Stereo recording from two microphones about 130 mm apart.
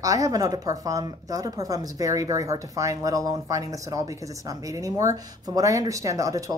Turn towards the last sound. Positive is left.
turn(degrees=-25)  # may be behind; listen again after turning